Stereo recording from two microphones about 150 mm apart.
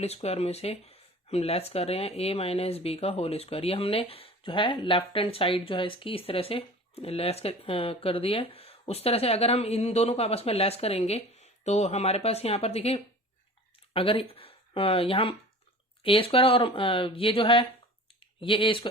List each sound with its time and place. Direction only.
0.0 s speech: 45° left (ahead or behind)